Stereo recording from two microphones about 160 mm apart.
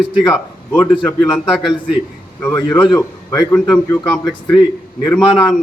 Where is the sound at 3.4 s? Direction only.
5° left (ahead or behind).